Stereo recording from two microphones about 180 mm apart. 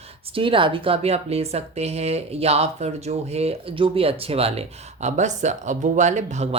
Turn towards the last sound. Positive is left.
turn(degrees=-40)  # may be behind; listen again after turning